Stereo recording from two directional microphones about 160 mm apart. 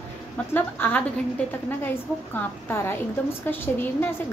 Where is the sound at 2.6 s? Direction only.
15° left (ahead or behind).